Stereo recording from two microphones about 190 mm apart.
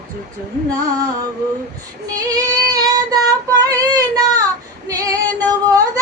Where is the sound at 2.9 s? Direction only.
20° right (ahead or behind).